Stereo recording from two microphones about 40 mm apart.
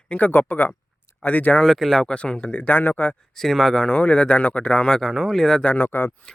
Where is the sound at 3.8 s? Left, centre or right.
Left.